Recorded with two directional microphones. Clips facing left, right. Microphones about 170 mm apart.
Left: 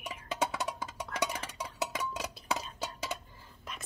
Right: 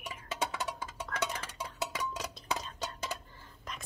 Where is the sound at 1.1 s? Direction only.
10° left (ahead or behind).